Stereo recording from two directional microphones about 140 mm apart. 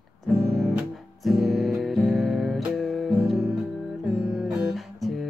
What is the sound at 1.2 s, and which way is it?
Music, centre (ahead or behind).